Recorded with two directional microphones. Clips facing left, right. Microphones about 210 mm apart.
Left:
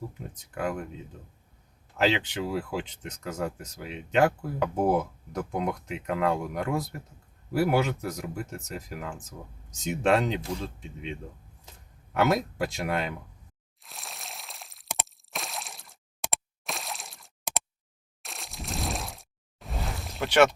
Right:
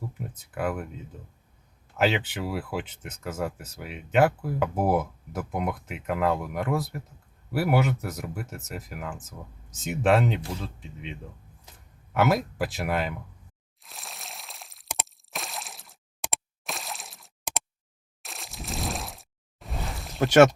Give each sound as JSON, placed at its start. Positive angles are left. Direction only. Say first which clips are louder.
{"t": 0.5, "sound": "speech", "louder": "right 1 dB", "side_deg": -5}
{"t": 2.0, "sound": "speech", "louder": "even", "side_deg": -5}
{"t": 12.1, "sound": "speech", "louder": "right 1 dB", "side_deg": -5}
{"t": 13.8, "sound": "a sound", "louder": "even", "side_deg": 0}
{"t": 18.2, "sound": "pour", "louder": "even", "side_deg": 0}
{"t": 20.1, "sound": "speech", "louder": "right 5 dB", "side_deg": -45}